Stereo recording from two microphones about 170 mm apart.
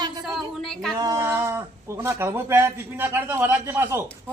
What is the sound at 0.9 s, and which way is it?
Speech, 20° right (ahead or behind).